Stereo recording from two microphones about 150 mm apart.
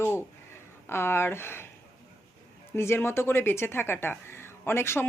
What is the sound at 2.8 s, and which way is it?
Speech, 15° left (ahead or behind).